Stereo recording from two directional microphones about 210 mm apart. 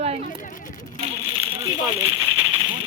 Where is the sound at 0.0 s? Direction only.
30° right (ahead or behind).